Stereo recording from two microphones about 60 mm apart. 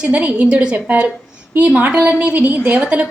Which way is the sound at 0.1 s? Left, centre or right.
Right.